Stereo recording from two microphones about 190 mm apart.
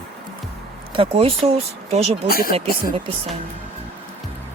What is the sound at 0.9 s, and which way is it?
Speech, 30° right (ahead or behind).